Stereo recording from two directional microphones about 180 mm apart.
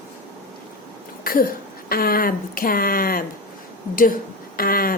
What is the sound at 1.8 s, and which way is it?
Speech, 55° left (ahead or behind).